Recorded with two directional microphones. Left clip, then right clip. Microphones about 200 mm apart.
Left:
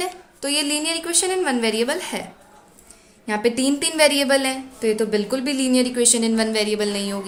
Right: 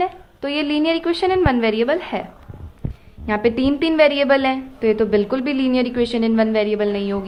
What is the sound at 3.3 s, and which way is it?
A woman's voice, 35° right (ahead or behind).